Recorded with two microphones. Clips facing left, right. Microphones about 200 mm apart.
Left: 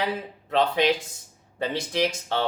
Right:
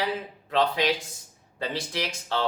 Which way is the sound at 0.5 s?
20° left (ahead or behind).